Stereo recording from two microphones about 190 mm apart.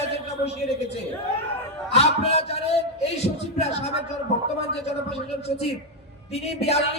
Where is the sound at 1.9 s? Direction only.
35° left (ahead or behind).